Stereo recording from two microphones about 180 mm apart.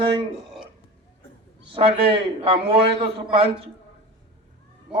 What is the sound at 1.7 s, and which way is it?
A man's voice, 30° right (ahead or behind).